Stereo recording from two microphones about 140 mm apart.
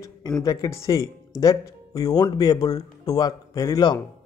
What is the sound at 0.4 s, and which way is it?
Speech, 25° left (ahead or behind).